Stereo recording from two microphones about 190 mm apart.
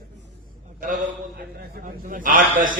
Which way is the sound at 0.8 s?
45° right (ahead or behind).